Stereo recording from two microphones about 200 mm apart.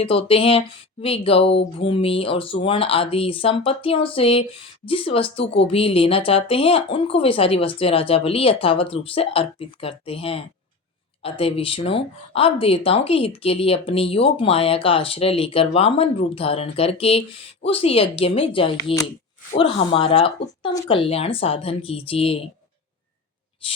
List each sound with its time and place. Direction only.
0.0 s speech: 30° left (ahead or behind)